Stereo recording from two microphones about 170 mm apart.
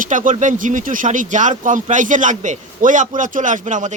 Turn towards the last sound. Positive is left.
turn(degrees=-45)  # may be behind; listen again after turning